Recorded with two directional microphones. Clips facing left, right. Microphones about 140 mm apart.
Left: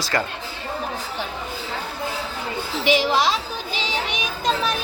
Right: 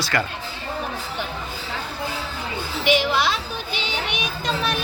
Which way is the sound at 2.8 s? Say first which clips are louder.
Left 1 dB; 35° left (ahead or behind).